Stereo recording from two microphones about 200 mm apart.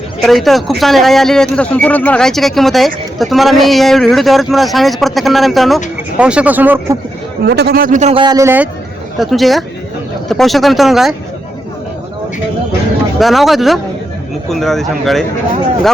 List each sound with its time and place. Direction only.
0.2 s speech: centre (ahead or behind)
7.4 s a man's voice: 55° right (ahead or behind); by 11.1 s centre (ahead or behind)
13.1 s speech: centre (ahead or behind)